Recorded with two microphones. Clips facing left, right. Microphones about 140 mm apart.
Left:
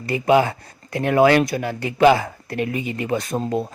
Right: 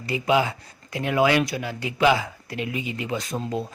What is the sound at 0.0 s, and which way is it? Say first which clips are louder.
Speech: left 5 dB; 50° left (ahead or behind).